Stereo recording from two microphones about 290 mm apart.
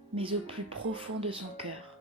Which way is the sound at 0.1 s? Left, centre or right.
Centre.